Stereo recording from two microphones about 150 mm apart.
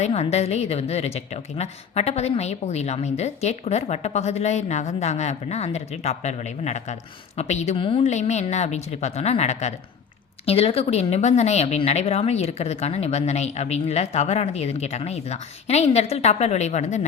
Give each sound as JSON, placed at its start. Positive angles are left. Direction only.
{"t": 0.0, "sound": "a woman's voice", "side_deg": 45}